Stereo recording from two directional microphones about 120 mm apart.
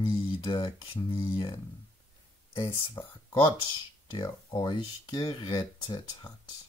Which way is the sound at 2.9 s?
35° left (ahead or behind).